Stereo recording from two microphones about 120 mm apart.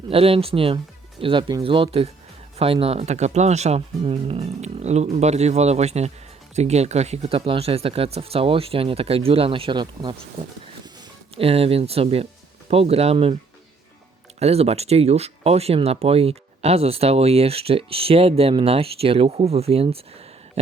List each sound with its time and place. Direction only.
0.1 s speech: 50° right (ahead or behind)
11.3 s speech: 55° right (ahead or behind)
14.3 s speech: 60° right (ahead or behind)